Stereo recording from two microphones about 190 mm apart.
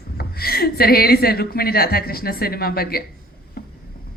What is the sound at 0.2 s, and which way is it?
A man's voice, 55° left (ahead or behind).